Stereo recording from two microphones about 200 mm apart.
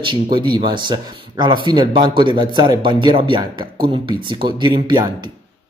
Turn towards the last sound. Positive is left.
turn(degrees=-25)  # may be behind; listen again after turning